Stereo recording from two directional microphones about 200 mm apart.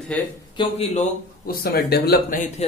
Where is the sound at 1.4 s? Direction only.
50° left (ahead or behind).